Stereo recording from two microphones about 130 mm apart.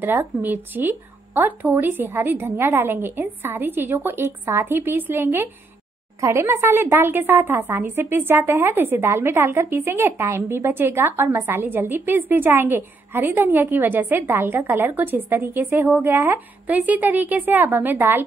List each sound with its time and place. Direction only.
0.0 s a woman's voice: 15° right (ahead or behind)